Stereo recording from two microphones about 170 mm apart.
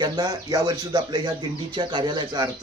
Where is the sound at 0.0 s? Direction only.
25° right (ahead or behind).